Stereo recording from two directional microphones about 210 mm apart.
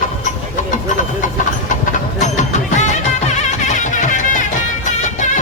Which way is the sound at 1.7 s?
35° left (ahead or behind).